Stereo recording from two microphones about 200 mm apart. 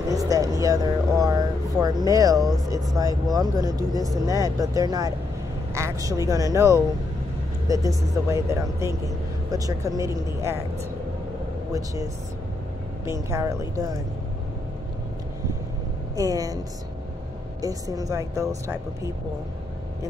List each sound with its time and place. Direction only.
0.1 s a sound: 15° right (ahead or behind)
3.0 s speech: 15° right (ahead or behind)
11.7 s speech: 15° right (ahead or behind)
16.2 s speech: 15° right (ahead or behind)
17.6 s speech: 15° right (ahead or behind)